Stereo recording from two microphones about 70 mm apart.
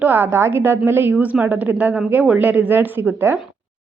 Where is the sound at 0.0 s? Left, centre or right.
Right.